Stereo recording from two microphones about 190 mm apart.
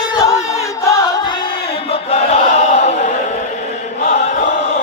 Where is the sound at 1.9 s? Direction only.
35° left (ahead or behind).